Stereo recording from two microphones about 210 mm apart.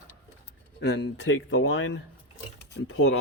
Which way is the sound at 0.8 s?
55° left (ahead or behind).